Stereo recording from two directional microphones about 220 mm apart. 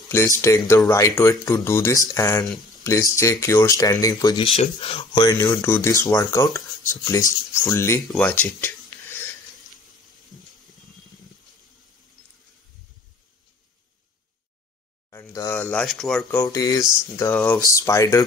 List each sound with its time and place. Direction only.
0.1 s speech: 10° left (ahead or behind)
15.0 s speech: 15° left (ahead or behind)
16.4 s speech: 15° left (ahead or behind)